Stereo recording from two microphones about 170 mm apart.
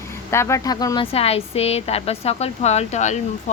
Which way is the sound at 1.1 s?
35° left (ahead or behind).